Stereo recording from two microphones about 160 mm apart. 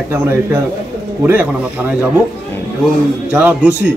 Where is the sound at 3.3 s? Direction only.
10° right (ahead or behind).